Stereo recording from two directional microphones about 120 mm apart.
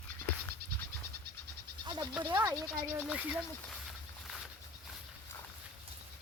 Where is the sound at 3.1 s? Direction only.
10° right (ahead or behind).